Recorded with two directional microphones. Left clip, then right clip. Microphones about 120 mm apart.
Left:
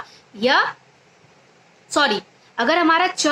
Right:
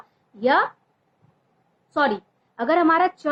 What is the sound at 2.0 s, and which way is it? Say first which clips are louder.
A woman's voice: left 3 dB; 15° left (ahead or behind).